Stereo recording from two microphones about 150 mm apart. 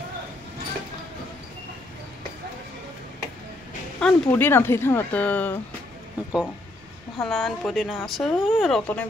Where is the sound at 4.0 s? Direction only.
15° left (ahead or behind).